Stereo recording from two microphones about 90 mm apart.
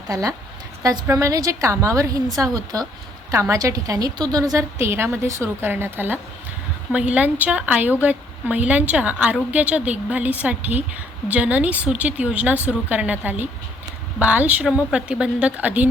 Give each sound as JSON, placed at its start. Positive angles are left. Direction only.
{"t": 0.1, "sound": "a woman's voice", "side_deg": -40}
{"t": 3.3, "sound": "a woman's voice", "side_deg": -35}
{"t": 4.8, "sound": "a woman's voice", "side_deg": -25}